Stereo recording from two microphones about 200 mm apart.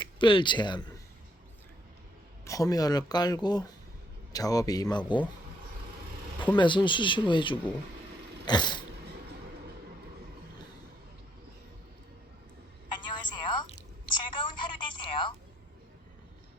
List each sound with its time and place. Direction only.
0.0 s speech: 25° left (ahead or behind)
2.4 s speech: 15° left (ahead or behind)
6.6 s speech: 25° left (ahead or behind)
12.9 s telephone: 20° left (ahead or behind)